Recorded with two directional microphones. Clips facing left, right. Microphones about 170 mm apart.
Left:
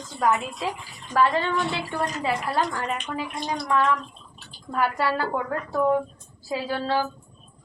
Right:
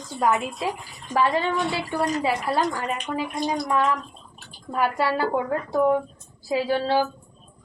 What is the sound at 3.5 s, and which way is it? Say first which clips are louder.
A woman's voice: left 1 dB; 20° right (ahead or behind).